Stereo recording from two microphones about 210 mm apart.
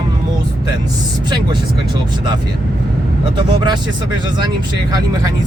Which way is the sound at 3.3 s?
20° right (ahead or behind).